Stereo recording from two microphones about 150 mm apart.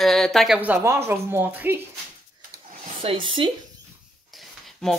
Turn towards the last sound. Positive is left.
turn(degrees=0)  # may be behind; listen again after turning